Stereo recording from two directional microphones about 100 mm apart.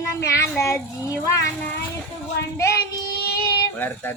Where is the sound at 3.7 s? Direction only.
20° left (ahead or behind).